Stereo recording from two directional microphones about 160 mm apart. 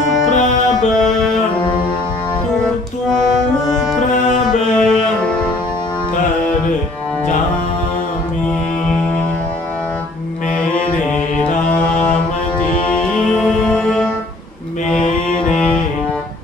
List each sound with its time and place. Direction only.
4.7 s music: 5° left (ahead or behind)
13.6 s music: 5° left (ahead or behind)